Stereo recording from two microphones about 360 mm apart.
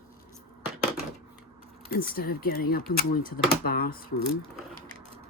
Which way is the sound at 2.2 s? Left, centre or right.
Left.